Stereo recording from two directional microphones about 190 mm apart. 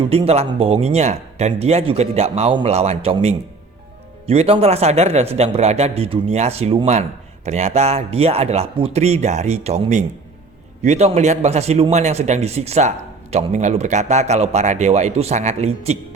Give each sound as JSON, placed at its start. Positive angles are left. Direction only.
{"t": 0.1, "sound": "a man's voice", "side_deg": -30}